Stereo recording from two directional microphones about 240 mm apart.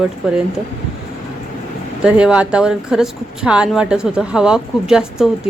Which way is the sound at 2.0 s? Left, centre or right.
Centre.